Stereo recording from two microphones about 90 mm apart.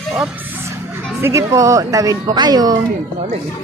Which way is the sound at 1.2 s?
35° right (ahead or behind).